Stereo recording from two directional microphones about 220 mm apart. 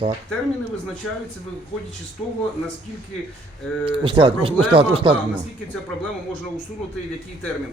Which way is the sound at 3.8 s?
25° right (ahead or behind).